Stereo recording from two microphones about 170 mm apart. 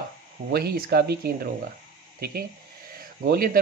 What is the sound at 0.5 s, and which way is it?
Speech, 65° right (ahead or behind).